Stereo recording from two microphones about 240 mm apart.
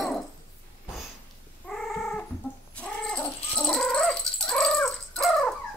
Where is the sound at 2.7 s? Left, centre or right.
Centre.